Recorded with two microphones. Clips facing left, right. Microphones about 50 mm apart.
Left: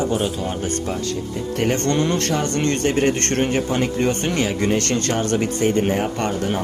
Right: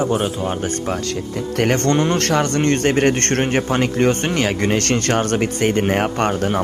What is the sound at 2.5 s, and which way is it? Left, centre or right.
Speech, right.